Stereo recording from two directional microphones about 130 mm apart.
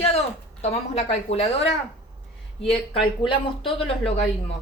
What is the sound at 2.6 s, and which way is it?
Speech, 40° left (ahead or behind).